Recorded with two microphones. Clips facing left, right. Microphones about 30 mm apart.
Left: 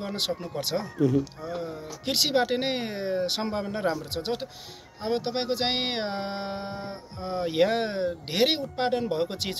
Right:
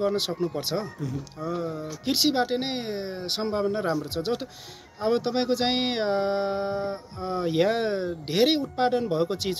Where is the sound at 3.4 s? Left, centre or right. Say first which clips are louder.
Right 2 dB; left.